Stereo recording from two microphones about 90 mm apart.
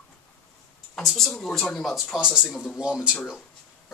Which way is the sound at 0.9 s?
5° left (ahead or behind).